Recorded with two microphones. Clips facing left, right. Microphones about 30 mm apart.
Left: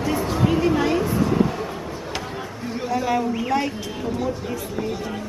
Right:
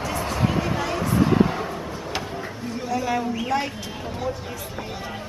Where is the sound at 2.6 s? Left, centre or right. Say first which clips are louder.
Left 3 dB; centre.